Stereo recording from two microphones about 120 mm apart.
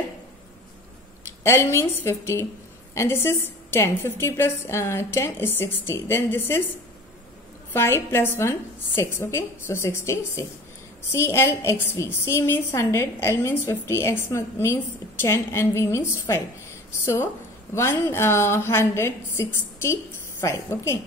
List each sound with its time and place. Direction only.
1.4 s a woman's voice: 25° left (ahead or behind)
7.7 s a woman's voice: 20° left (ahead or behind)